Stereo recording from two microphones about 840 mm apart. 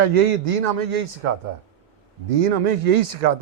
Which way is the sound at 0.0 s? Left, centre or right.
Right.